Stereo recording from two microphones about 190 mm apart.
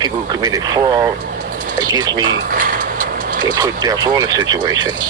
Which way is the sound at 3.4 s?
20° right (ahead or behind).